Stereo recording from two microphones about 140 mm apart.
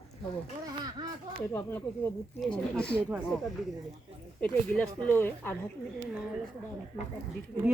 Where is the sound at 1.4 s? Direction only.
15° left (ahead or behind).